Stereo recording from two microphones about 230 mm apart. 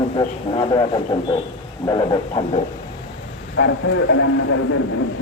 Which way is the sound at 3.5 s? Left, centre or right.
Left.